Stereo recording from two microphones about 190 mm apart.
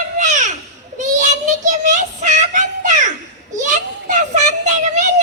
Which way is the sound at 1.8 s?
40° right (ahead or behind).